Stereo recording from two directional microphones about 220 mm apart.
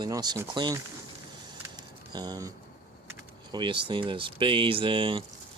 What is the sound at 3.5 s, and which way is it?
Speech, 20° right (ahead or behind).